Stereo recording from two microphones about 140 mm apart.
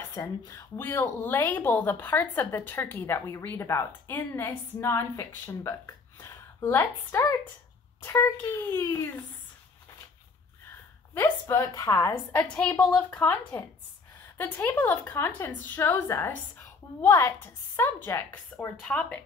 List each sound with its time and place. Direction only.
0.1 s a woman's voice: 20° left (ahead or behind)
11.1 s a woman's voice: 20° left (ahead or behind)